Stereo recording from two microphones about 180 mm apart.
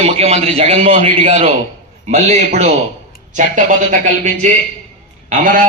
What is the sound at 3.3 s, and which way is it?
A man's voice, 45° right (ahead or behind).